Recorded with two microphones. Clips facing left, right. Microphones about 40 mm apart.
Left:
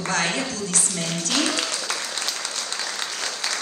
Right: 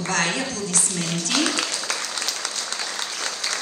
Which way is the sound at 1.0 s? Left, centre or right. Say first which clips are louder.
Right 1 dB; left.